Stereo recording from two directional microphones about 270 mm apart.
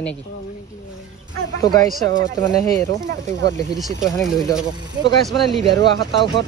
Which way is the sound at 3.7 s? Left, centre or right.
Centre.